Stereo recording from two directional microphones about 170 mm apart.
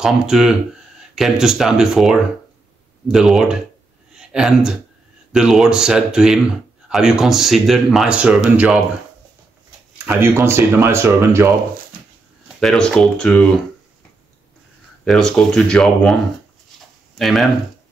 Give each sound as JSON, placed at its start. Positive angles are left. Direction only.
{"t": 0.0, "sound": "speech", "side_deg": -5}
{"t": 4.1, "sound": "a sound", "side_deg": -5}
{"t": 5.3, "sound": "speech", "side_deg": -5}
{"t": 10.0, "sound": "speech", "side_deg": -15}
{"t": 12.5, "sound": "speech", "side_deg": 5}
{"t": 15.0, "sound": "speech", "side_deg": 5}
{"t": 17.2, "sound": "speech", "side_deg": 0}